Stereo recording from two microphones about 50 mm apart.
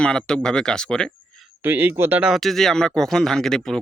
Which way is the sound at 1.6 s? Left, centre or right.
Right.